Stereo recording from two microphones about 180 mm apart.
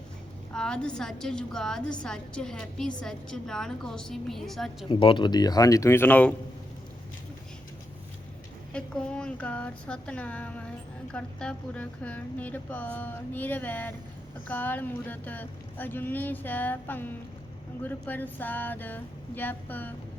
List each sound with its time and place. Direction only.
0.5 s a woman's voice: 5° left (ahead or behind)
4.9 s speech: 30° left (ahead or behind); by 6.3 s 10° left (ahead or behind)
8.7 s a woman's voice: 5° left (ahead or behind)